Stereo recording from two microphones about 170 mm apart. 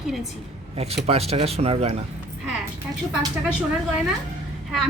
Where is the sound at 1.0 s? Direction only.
35° right (ahead or behind).